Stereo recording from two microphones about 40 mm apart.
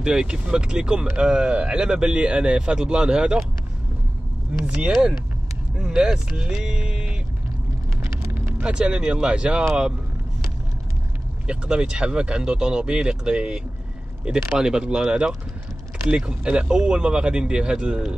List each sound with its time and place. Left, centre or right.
0.0 s speech: centre
4.5 s speech: right
5.8 s speech: centre
6.5 s music: centre
8.6 s speech: right
11.4 s speech: right